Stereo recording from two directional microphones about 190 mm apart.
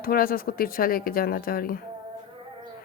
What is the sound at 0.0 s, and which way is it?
A woman's voice, 50° left (ahead or behind).